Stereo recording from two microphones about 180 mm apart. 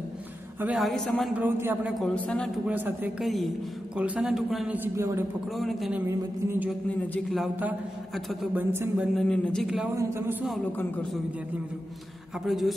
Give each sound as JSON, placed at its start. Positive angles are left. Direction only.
{"t": 0.6, "sound": "a man's voice", "side_deg": -5}
{"t": 1.4, "sound": "a man's voice", "side_deg": -10}
{"t": 2.0, "sound": "a man's voice", "side_deg": 5}
{"t": 2.6, "sound": "a man's voice", "side_deg": -10}
{"t": 5.6, "sound": "a man's voice", "side_deg": 0}
{"t": 6.0, "sound": "a man's voice", "side_deg": -15}
{"t": 7.2, "sound": "a man's voice", "side_deg": 0}
{"t": 8.7, "sound": "a man's voice", "side_deg": -15}
{"t": 9.1, "sound": "a man's voice", "side_deg": 5}
{"t": 9.9, "sound": "a man's voice", "side_deg": -15}
{"t": 12.4, "sound": "a man's voice", "side_deg": 0}